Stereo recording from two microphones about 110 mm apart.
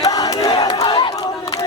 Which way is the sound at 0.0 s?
35° left (ahead or behind).